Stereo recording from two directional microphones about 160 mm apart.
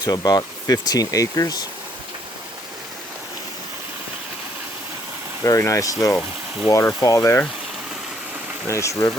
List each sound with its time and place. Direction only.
0.0 s speech: 25° left (ahead or behind)
5.4 s speech: 20° left (ahead or behind)
8.6 s speech: 20° left (ahead or behind)